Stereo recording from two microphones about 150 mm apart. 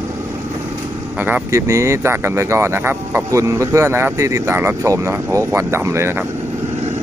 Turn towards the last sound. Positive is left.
turn(degrees=-20)  # may be behind; listen again after turning